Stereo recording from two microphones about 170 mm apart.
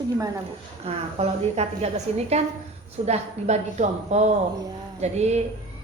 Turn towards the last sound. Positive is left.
turn(degrees=-40)  # may be behind; listen again after turning